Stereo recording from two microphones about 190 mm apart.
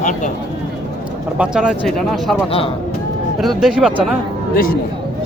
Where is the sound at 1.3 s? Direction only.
5° right (ahead or behind).